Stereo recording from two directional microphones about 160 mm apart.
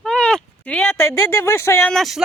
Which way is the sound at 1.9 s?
Centre (ahead or behind).